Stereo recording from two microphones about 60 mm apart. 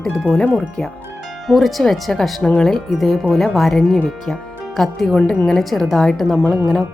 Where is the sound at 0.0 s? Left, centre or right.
Centre.